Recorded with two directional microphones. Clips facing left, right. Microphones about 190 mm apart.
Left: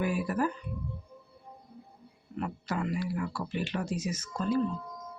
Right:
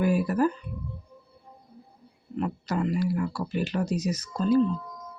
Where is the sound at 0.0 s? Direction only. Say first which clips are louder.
Right 6 dB; 40° right (ahead or behind).